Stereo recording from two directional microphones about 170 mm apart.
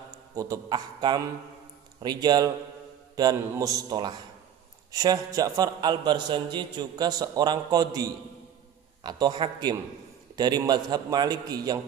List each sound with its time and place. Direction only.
0.4 s a man's voice: 20° right (ahead or behind)